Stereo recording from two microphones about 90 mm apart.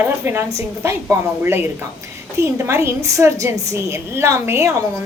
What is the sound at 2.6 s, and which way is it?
Speech, 30° right (ahead or behind).